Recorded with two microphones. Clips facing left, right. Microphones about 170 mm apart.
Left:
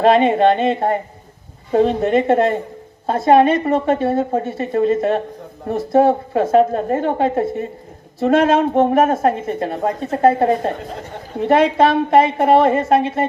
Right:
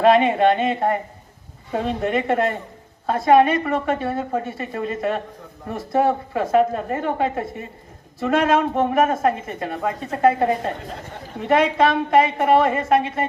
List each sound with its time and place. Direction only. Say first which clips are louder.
0.0 s a woman's voice: left 3 dB; 30° left (ahead or behind)